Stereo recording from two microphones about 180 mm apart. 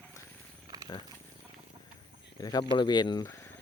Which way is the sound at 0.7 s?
20° right (ahead or behind).